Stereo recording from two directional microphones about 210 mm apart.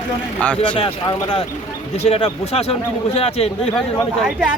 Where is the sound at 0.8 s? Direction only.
20° left (ahead or behind).